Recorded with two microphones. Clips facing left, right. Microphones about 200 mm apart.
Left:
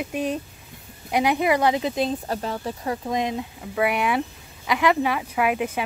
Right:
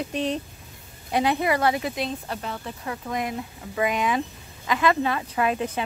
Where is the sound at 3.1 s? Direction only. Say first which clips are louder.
Left 2 dB; 20° left (ahead or behind).